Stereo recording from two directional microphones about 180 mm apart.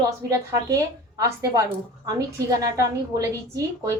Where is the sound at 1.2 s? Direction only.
15° right (ahead or behind).